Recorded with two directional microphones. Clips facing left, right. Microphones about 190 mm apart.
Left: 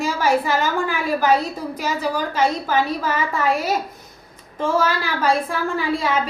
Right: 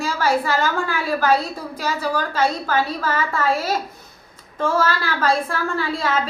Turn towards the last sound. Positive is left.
turn(degrees=15)  # may be behind; listen again after turning